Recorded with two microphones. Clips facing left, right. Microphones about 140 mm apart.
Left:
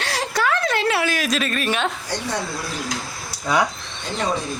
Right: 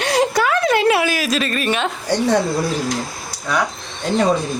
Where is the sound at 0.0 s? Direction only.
20° right (ahead or behind); by 1.9 s centre (ahead or behind).